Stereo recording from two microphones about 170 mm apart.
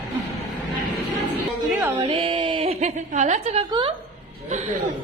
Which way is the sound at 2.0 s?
30° right (ahead or behind).